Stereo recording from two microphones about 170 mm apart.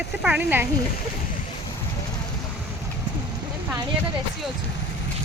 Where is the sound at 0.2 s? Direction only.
10° right (ahead or behind).